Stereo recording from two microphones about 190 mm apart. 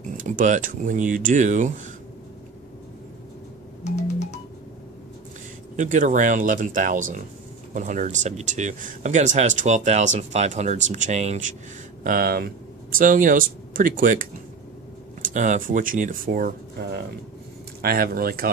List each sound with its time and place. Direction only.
0.2 s speech: 45° right (ahead or behind)
3.8 s music: 35° left (ahead or behind)
5.8 s speech: 40° right (ahead or behind)
12.0 s speech: 50° right (ahead or behind)
15.2 s speech: 40° right (ahead or behind)